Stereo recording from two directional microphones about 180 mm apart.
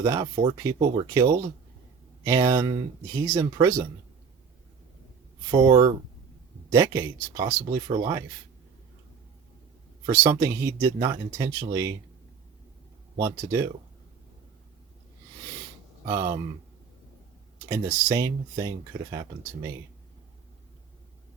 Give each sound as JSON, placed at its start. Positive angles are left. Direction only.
{"t": 0.0, "sound": "speech", "side_deg": -20}
{"t": 5.5, "sound": "speech", "side_deg": -20}
{"t": 10.1, "sound": "speech", "side_deg": -15}
{"t": 13.1, "sound": "speech", "side_deg": -20}
{"t": 16.0, "sound": "speech", "side_deg": -20}
{"t": 17.7, "sound": "speech", "side_deg": -15}